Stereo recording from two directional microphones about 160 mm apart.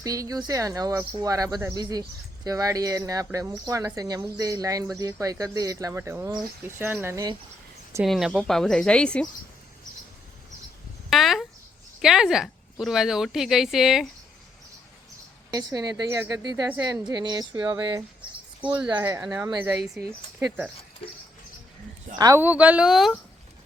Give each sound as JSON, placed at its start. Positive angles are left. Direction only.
{"t": 0.0, "sound": "speech", "side_deg": -20}
{"t": 8.0, "sound": "speech", "side_deg": 0}
{"t": 11.1, "sound": "speech", "side_deg": 0}
{"t": 15.4, "sound": "speech", "side_deg": -25}
{"t": 19.6, "sound": "speech", "side_deg": -5}
{"t": 22.2, "sound": "speech", "side_deg": -15}